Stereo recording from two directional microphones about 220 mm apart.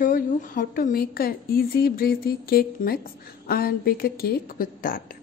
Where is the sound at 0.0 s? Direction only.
40° left (ahead or behind).